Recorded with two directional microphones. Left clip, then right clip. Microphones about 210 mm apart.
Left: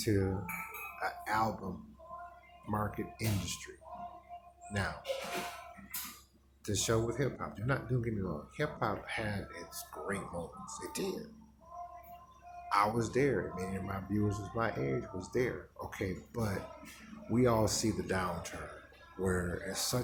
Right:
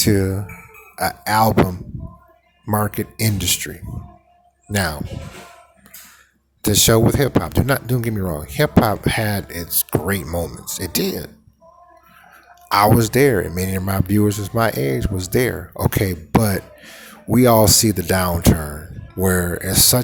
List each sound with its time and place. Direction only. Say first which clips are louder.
0.0 s speech: right 15 dB; 50° right (ahead or behind)
2.6 s speech: right 15 dB; 50° right (ahead or behind)
4.7 s speech: right 16 dB; 50° right (ahead or behind)
6.6 s speech: right 18 dB; 50° right (ahead or behind)
12.6 s speech: right 16 dB; 50° right (ahead or behind)